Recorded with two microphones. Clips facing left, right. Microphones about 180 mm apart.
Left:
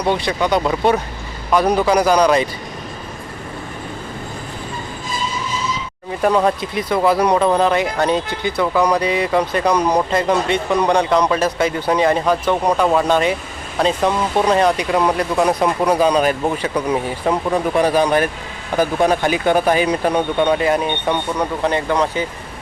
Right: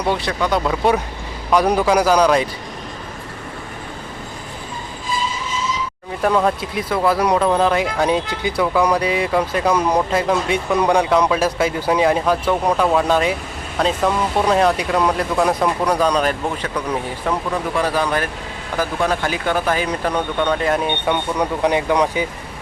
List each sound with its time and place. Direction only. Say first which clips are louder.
0.0 s speech: left 2 dB; 5° right (ahead or behind)
6.2 s speech: left 2 dB; centre (ahead or behind)
17.7 s speech: left 5 dB; 15° left (ahead or behind)
21.3 s speech: right 1 dB; 10° right (ahead or behind)